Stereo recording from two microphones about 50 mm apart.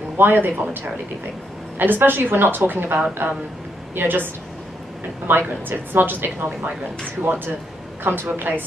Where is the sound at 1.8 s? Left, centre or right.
Right.